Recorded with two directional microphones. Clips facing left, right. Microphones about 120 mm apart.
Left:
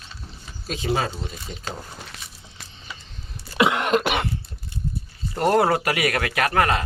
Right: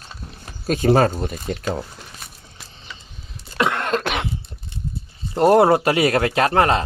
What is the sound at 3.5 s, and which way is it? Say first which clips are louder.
Cough: left 1 dB; 10° left (ahead or behind).